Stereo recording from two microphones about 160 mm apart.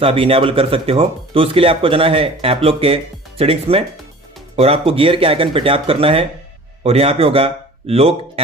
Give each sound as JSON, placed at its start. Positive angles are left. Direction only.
{"t": 0.0, "sound": "speech", "side_deg": -35}